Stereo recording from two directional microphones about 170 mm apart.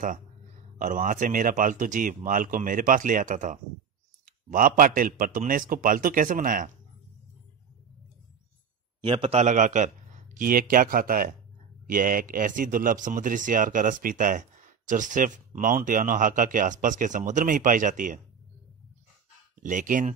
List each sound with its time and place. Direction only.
0.7 s speech: 50° right (ahead or behind)
9.0 s speech: 35° right (ahead or behind)
19.6 s speech: 50° right (ahead or behind)